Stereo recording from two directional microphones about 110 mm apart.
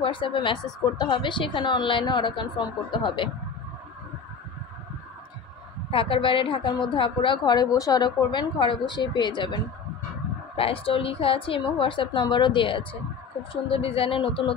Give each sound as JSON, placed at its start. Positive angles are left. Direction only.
{"t": 0.0, "sound": "a woman's voice", "side_deg": 50}
{"t": 5.9, "sound": "a woman's voice", "side_deg": 55}
{"t": 10.5, "sound": "a woman's voice", "side_deg": 55}